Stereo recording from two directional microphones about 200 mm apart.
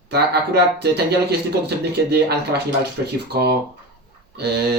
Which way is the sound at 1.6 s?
55° right (ahead or behind).